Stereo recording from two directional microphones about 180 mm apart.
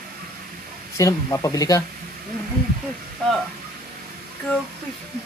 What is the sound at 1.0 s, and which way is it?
Speech, 20° left (ahead or behind).